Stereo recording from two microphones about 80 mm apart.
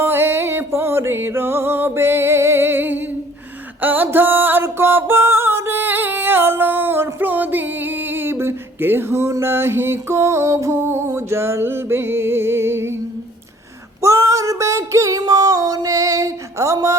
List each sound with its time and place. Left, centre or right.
0.0 s music: right
14.0 s child singing: right
15.2 s female singing: right